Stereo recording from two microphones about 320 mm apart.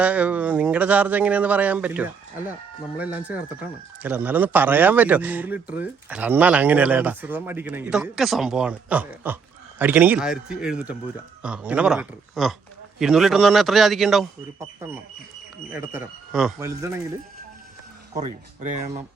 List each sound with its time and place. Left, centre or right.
0.0 s speech: centre
15.7 s speech: centre
18.1 s speech: centre